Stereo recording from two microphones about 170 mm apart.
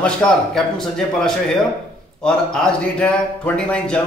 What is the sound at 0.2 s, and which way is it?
Speech, 5° left (ahead or behind).